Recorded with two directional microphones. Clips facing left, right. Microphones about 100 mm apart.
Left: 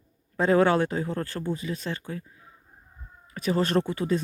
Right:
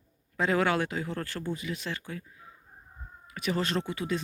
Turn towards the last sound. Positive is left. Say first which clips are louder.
# left 6 dB
turn(degrees=40)  # may be behind; listen again after turning